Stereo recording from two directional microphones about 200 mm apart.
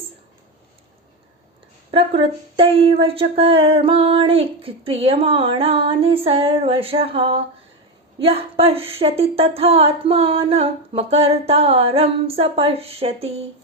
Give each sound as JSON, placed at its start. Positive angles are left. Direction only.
{"t": 1.9, "sound": "speech", "side_deg": -25}